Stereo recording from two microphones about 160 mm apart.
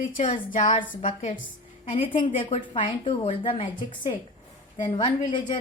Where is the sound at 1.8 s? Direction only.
35° left (ahead or behind).